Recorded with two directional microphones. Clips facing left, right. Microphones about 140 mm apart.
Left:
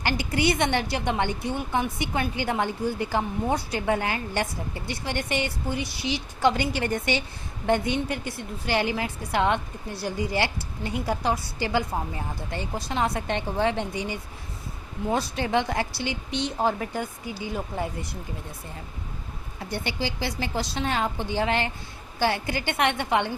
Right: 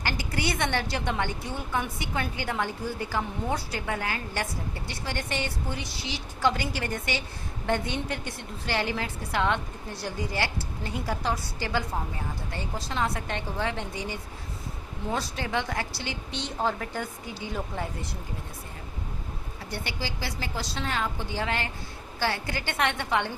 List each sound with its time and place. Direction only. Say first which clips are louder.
0.0 s a woman's voice: left 5 dB; 20° left (ahead or behind)
19.7 s a woman's voice: left 5 dB; 25° left (ahead or behind)